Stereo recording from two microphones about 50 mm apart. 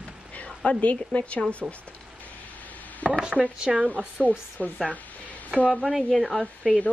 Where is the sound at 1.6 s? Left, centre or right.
Centre.